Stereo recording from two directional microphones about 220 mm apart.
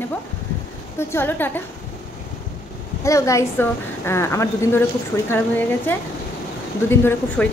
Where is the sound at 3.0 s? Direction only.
15° left (ahead or behind).